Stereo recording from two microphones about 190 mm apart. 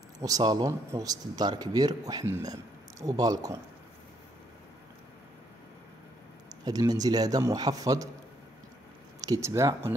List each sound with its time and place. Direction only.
0.2 s a man's voice: 20° right (ahead or behind)
6.5 s a man's voice: 20° right (ahead or behind)
9.2 s speech: 15° right (ahead or behind)